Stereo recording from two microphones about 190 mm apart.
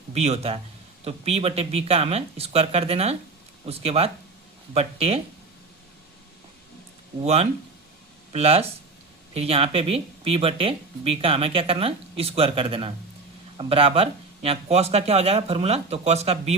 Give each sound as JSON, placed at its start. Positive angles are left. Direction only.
{"t": 0.1, "sound": "speech", "side_deg": -35}
{"t": 8.3, "sound": "speech", "side_deg": -30}